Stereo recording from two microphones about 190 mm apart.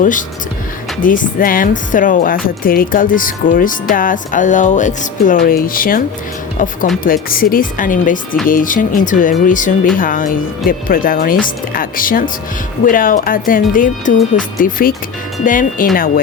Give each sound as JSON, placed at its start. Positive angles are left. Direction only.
{"t": 0.0, "sound": "a woman's voice", "side_deg": 45}